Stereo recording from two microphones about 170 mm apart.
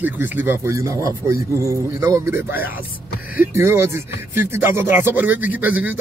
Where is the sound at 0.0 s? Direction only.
10° right (ahead or behind).